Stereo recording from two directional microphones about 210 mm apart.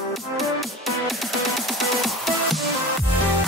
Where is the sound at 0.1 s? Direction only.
Centre (ahead or behind).